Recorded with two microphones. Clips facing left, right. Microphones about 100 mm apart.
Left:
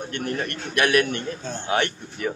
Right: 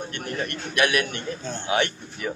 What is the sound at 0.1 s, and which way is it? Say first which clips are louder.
A man's voice: left 2 dB; 40° left (ahead or behind).